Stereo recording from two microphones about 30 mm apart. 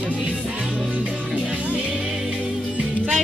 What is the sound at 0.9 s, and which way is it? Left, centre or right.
Music, right.